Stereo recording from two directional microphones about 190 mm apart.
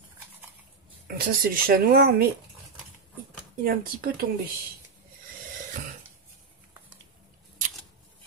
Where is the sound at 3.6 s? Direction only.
50° right (ahead or behind).